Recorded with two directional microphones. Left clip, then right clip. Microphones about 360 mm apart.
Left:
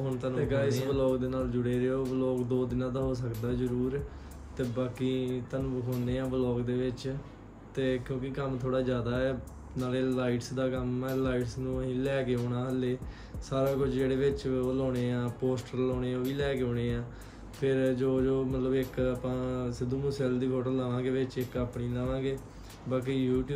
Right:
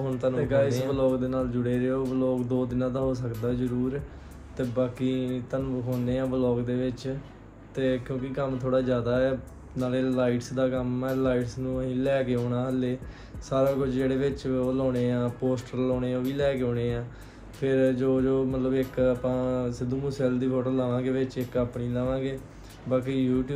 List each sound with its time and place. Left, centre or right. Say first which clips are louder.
0.0 s speech: right 5 dB; centre